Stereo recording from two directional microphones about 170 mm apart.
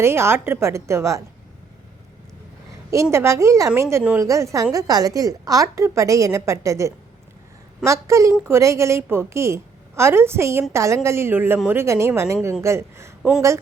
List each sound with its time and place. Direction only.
0.0 s a woman's voice: 15° right (ahead or behind)
2.9 s a woman's voice: 15° right (ahead or behind)